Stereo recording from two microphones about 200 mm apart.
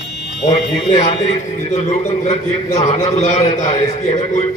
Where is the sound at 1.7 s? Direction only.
35° left (ahead or behind).